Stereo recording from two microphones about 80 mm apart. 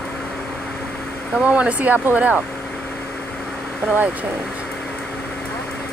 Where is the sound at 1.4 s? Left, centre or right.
Centre.